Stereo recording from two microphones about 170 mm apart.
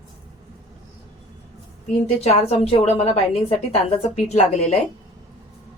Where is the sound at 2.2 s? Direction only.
40° left (ahead or behind).